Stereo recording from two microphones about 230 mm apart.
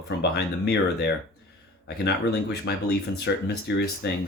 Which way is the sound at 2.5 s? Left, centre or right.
Left.